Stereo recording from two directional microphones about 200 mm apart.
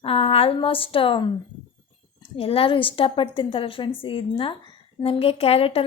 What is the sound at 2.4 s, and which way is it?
A woman's voice, 30° left (ahead or behind).